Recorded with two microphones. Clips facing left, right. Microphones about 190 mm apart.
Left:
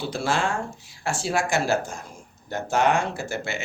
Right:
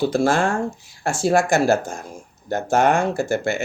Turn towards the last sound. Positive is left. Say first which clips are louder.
# right 8 dB
turn(degrees=-50)  # may be behind; listen again after turning